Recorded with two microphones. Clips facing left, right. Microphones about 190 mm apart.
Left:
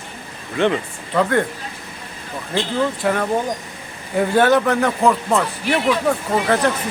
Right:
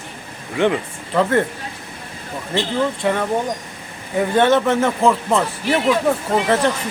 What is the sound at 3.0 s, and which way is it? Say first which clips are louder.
Speech: even; 5° left (ahead or behind).